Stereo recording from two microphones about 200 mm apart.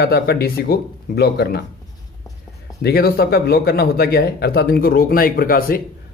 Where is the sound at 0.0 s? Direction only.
55° left (ahead or behind).